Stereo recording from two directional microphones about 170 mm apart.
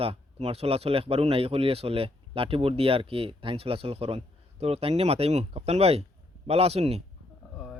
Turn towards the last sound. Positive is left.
turn(degrees=-40)  # may be behind; listen again after turning